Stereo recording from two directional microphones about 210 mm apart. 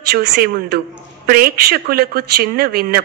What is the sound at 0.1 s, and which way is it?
Speech, 50° right (ahead or behind).